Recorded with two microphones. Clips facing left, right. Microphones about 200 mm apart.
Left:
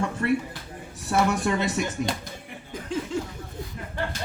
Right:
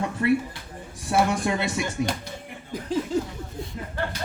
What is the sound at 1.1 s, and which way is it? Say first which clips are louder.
Speech: even; 10° right (ahead or behind).